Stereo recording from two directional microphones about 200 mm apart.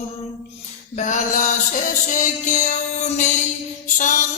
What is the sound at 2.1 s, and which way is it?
Music, 35° left (ahead or behind).